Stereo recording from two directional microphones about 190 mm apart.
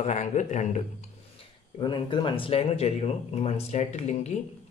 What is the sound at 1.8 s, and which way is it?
Speech, 25° left (ahead or behind).